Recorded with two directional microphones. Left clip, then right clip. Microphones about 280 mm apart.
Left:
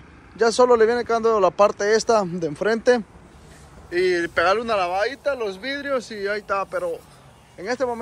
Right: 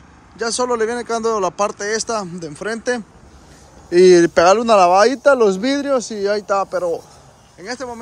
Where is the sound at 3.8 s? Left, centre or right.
Right.